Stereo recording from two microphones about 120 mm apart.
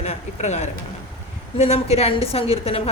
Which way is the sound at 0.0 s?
70° left (ahead or behind).